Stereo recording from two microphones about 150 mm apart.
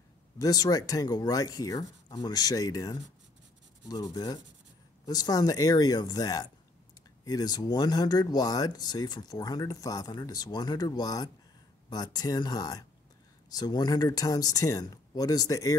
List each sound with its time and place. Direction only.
0.4 s speech: 25° left (ahead or behind)